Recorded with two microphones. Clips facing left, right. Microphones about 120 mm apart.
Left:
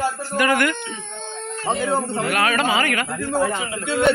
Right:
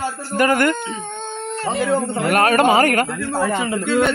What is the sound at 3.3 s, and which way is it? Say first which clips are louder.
Speech: even; 60° right (ahead or behind).